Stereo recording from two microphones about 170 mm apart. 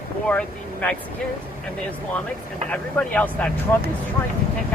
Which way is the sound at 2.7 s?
10° left (ahead or behind).